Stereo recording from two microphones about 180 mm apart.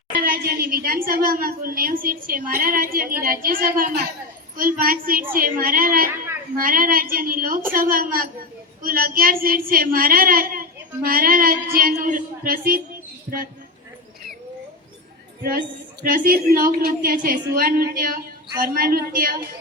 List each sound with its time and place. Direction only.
0.2 s a woman's voice: 55° right (ahead or behind)
16.0 s a woman's voice: 50° right (ahead or behind)